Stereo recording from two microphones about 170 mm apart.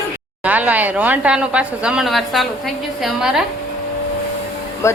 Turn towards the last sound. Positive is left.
turn(degrees=15)  # may be behind; listen again after turning